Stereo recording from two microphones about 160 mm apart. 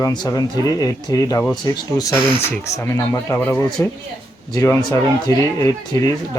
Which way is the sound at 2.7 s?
20° left (ahead or behind).